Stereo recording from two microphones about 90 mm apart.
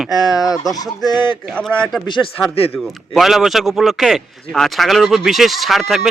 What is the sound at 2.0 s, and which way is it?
Speech, 60° left (ahead or behind).